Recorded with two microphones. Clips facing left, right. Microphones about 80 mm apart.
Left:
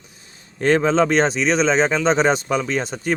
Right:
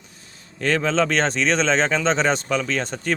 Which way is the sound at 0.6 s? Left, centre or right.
Left.